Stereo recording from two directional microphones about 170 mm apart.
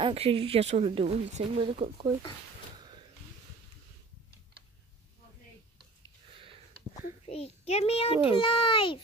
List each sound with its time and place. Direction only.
0.0 s speech: 35° right (ahead or behind)
7.2 s a child's voice: 40° left (ahead or behind)